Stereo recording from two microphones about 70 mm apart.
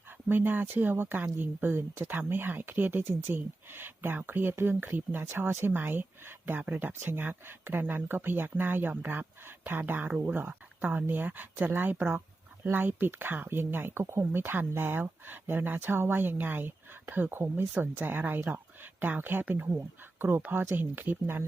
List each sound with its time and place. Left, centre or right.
0.3 s speech: right